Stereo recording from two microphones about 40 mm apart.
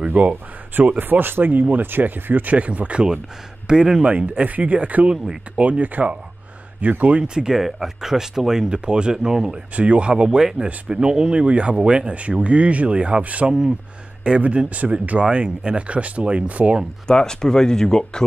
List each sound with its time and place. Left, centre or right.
0.0 s speech: right
0.9 s speech: right
2.5 s speech: right
5.1 s speech: centre
5.6 s speech: right
7.2 s speech: right
7.5 s speech: centre
8.6 s speech: right
9.8 s speech: right
13.2 s speech: right
13.5 s speech: centre
14.2 s speech: right
17.1 s speech: centre